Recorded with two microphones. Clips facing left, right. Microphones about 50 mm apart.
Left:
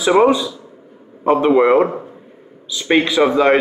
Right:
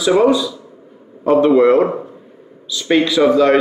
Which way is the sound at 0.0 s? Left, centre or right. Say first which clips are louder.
Even; left.